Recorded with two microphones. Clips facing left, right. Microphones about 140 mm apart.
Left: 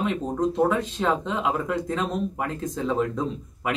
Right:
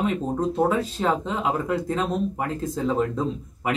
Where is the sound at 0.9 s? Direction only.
5° right (ahead or behind).